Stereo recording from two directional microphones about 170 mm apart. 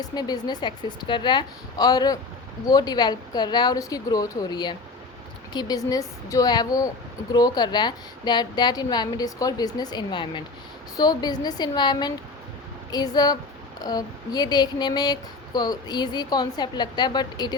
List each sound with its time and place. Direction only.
0.0 s speech: 25° left (ahead or behind)